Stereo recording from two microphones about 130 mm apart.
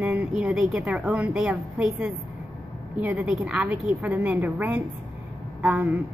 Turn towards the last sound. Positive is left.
turn(degrees=-15)  # may be behind; listen again after turning